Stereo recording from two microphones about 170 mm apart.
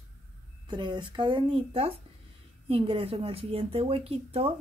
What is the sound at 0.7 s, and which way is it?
Speech, 25° right (ahead or behind).